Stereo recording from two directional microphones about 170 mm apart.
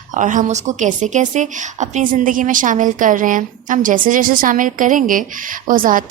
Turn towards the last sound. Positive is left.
turn(degrees=-55)  # may be behind; listen again after turning